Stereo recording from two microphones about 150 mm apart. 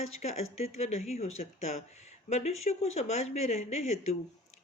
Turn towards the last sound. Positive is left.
turn(degrees=45)  # may be behind; listen again after turning